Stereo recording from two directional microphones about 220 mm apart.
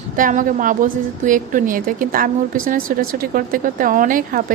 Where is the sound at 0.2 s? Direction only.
35° right (ahead or behind).